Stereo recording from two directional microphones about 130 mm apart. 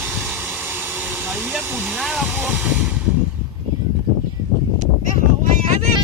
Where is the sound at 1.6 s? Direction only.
15° right (ahead or behind).